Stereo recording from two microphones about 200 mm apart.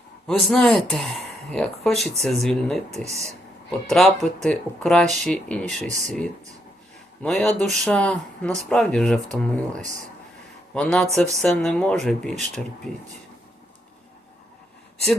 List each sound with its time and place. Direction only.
0.3 s speech: centre (ahead or behind)
2.9 s speech: 35° right (ahead or behind)
3.8 s speech: centre (ahead or behind)